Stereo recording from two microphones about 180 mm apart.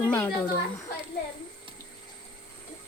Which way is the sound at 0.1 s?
10° left (ahead or behind).